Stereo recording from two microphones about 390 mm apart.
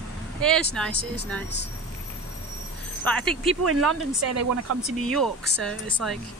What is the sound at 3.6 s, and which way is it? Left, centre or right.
Speech, right.